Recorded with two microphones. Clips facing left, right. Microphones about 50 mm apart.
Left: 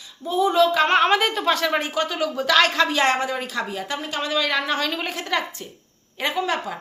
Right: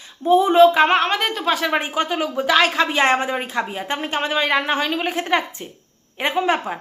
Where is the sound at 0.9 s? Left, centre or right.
Centre.